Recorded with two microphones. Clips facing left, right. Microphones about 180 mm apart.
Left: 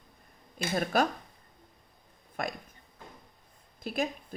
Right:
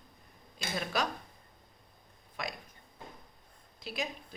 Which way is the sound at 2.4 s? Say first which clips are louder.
Left 5 dB; 50° left (ahead or behind).